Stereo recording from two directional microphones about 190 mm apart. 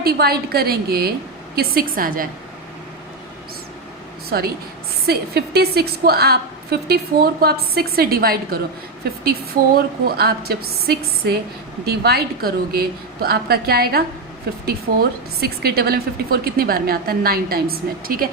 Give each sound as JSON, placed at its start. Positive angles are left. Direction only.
{"t": 0.0, "sound": "a woman's voice", "side_deg": -55}
{"t": 4.3, "sound": "a woman's voice", "side_deg": -55}
{"t": 9.7, "sound": "a woman's voice", "side_deg": -55}